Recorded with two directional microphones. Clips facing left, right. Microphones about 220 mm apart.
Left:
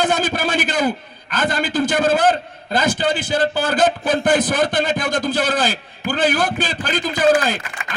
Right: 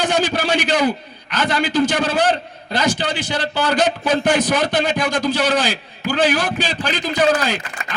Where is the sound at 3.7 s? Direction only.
55° left (ahead or behind).